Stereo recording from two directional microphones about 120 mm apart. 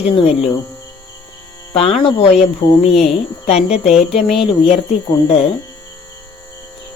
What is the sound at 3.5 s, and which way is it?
Speech, 60° left (ahead or behind).